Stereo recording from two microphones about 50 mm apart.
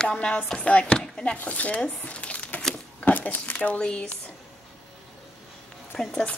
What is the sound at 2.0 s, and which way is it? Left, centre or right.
Crumpling, left.